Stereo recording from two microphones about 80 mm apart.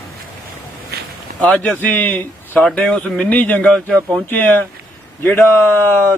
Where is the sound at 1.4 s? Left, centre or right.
Centre.